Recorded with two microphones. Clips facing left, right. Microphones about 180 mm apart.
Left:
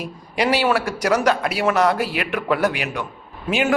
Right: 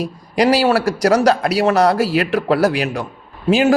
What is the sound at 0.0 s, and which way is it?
A man's voice, 40° right (ahead or behind).